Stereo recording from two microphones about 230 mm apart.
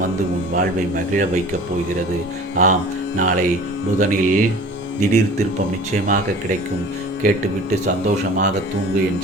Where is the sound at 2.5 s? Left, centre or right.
Right.